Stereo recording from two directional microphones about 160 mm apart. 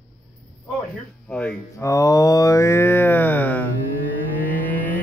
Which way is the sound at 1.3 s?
5° left (ahead or behind).